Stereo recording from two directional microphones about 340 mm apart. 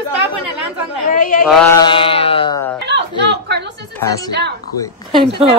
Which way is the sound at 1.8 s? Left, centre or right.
Centre.